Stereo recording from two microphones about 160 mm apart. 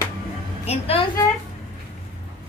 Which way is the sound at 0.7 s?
40° left (ahead or behind).